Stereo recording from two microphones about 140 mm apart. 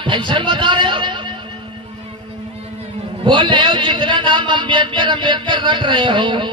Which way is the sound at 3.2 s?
35° right (ahead or behind).